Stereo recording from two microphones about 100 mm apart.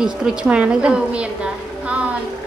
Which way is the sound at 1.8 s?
15° right (ahead or behind).